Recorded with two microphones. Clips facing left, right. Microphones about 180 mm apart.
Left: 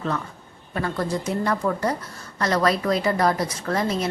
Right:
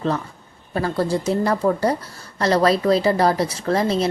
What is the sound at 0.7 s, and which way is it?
A woman's voice, 35° right (ahead or behind).